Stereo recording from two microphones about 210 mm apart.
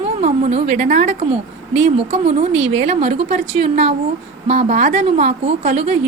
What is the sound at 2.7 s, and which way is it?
A woman's voice, 30° right (ahead or behind).